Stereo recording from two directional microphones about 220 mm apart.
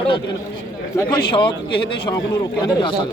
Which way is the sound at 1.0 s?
20° left (ahead or behind).